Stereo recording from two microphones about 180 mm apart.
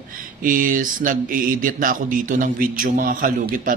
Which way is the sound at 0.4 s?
50° right (ahead or behind).